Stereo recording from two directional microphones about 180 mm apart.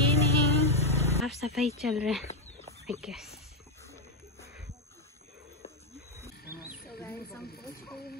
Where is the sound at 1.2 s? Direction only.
Centre (ahead or behind).